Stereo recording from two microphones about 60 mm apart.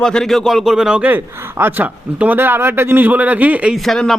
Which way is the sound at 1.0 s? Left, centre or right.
Right.